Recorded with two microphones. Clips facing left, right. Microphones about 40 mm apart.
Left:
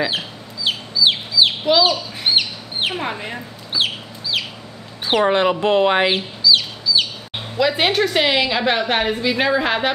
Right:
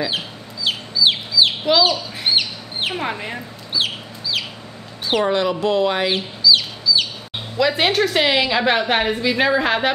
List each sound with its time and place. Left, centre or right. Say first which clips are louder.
0.7 s chicken: even; centre
2.9 s a woman's voice: even; centre
3.7 s chicken: left 1 dB; centre
5.0 s speech: left 2 dB; centre
6.1 s chicken: even; centre
7.5 s a woman's voice: even; centre